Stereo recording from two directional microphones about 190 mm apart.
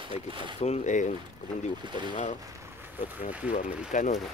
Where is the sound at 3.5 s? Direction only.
45° left (ahead or behind).